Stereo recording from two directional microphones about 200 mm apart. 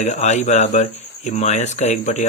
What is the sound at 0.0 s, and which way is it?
Speech, 35° left (ahead or behind).